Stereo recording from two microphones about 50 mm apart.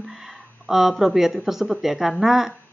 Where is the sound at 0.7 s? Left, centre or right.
Centre.